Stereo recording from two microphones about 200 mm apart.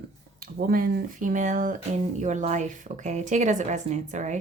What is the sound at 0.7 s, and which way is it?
Speech, 45° right (ahead or behind).